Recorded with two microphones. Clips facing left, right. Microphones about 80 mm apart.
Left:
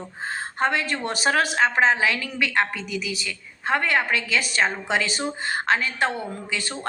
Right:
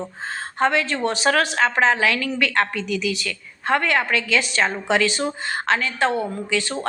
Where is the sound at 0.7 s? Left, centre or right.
Left.